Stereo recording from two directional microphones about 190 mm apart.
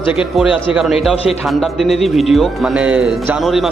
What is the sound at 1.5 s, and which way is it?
Speech, centre (ahead or behind).